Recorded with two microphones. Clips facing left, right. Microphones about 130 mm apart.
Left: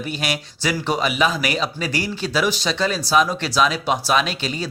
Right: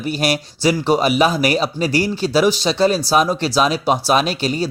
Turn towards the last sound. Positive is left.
turn(degrees=-35)  # may be behind; listen again after turning